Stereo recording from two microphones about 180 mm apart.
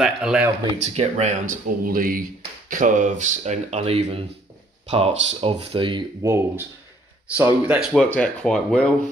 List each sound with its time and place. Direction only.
0.0 s speech: 5° right (ahead or behind)
0.8 s speech: 35° right (ahead or behind)
6.2 s speech: 15° right (ahead or behind); by 8.9 s 5° left (ahead or behind)